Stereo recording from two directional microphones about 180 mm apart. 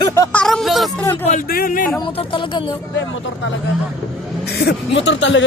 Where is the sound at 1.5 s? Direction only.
55° left (ahead or behind).